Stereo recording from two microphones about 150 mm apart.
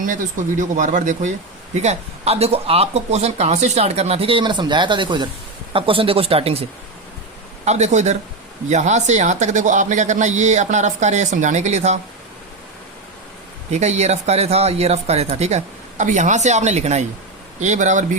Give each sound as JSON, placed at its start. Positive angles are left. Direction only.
{"t": 0.0, "sound": "speech", "side_deg": -60}
{"t": 13.7, "sound": "speech", "side_deg": -50}